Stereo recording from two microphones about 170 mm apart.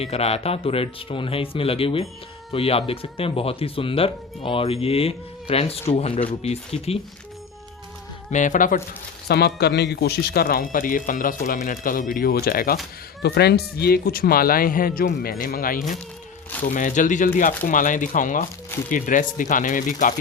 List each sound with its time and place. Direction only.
0.0 s speech: 35° left (ahead or behind)
8.3 s speech: 45° left (ahead or behind)
9.2 s speech: 70° left (ahead or behind)
13.2 s speech: 75° left (ahead or behind); by 20.1 s 50° left (ahead or behind)